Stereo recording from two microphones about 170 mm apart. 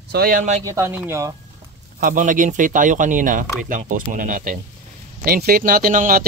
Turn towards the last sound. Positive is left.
turn(degrees=-55)  # may be behind; listen again after turning